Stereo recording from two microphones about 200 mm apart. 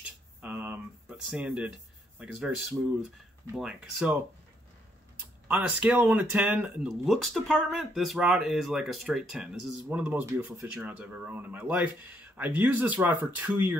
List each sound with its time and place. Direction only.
0.4 s a sound: 10° right (ahead or behind)
3.5 s speech: 5° right (ahead or behind)
5.5 s speech: 5° right (ahead or behind)